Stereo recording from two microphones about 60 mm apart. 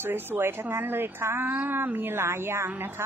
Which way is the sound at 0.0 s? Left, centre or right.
Right.